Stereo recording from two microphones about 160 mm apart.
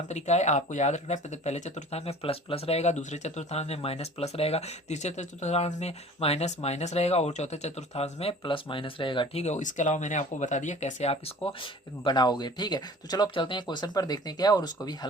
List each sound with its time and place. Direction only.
0.1 s speech: 45° left (ahead or behind); by 14.9 s 25° left (ahead or behind)